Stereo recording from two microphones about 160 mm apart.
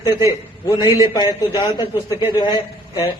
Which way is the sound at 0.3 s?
25° left (ahead or behind).